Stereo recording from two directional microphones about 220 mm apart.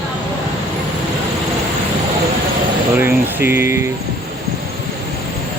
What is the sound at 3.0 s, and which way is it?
Speech, 10° right (ahead or behind).